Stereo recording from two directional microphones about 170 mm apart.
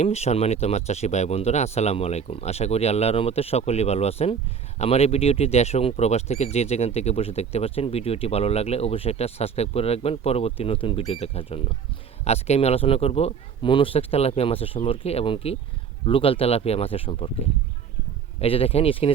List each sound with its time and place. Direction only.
0.0 s speech: 40° left (ahead or behind)
18.3 s speech: 35° left (ahead or behind)